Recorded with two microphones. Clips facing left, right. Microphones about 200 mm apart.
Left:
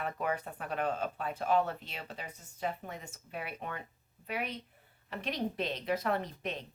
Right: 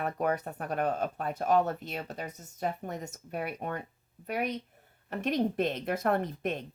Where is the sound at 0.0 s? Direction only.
45° right (ahead or behind).